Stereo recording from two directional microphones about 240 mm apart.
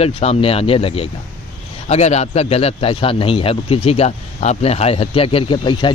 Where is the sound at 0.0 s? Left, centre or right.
Left.